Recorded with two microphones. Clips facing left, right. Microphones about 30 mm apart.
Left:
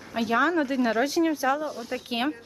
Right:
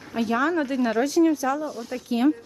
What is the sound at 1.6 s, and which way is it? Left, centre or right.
Speech, centre.